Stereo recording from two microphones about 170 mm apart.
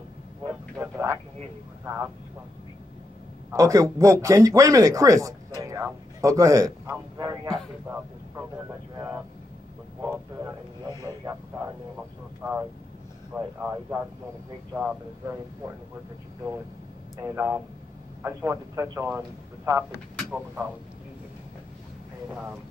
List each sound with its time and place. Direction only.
0.5 s a sound: 15° right (ahead or behind)
3.5 s a man's voice: 20° right (ahead or behind)
7.4 s a sound: 5° left (ahead or behind)
8.9 s vehicle: 15° right (ahead or behind)
10.0 s speech: 15° right (ahead or behind)
12.4 s a man's voice: 15° right (ahead or behind)
17.2 s a man's voice: 15° right (ahead or behind)
22.3 s speech: 5° right (ahead or behind)